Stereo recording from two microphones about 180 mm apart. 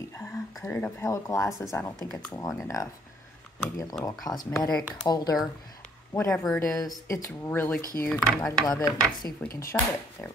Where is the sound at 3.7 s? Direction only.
15° left (ahead or behind).